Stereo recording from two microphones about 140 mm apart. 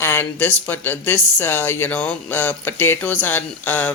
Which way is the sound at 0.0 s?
15° left (ahead or behind).